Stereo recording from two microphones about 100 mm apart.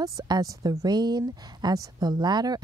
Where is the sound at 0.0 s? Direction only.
40° right (ahead or behind).